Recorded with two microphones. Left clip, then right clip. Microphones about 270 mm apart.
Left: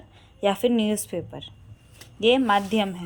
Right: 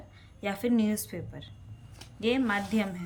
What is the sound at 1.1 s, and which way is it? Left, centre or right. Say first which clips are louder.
Speech: left 10 dB; left.